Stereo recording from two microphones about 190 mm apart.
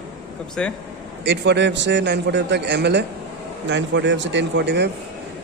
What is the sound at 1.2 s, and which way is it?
A man's voice, 65° right (ahead or behind).